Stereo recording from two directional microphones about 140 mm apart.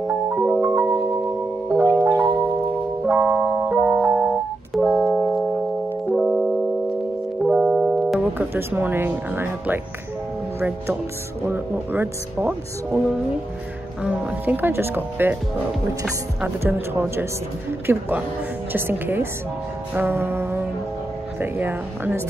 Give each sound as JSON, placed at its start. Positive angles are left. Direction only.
{"t": 0.4, "sound": "music", "side_deg": -5}
{"t": 0.7, "sound": "music", "side_deg": -15}
{"t": 2.1, "sound": "music", "side_deg": -30}
{"t": 3.1, "sound": "music", "side_deg": -10}
{"t": 7.4, "sound": "speech", "side_deg": -10}
{"t": 11.4, "sound": "speech", "side_deg": -15}
{"t": 14.0, "sound": "speech", "side_deg": -10}
{"t": 16.3, "sound": "speech", "side_deg": -15}